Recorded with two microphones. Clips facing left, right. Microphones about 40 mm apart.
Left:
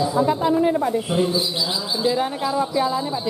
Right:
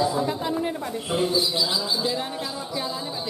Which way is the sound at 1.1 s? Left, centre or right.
Centre.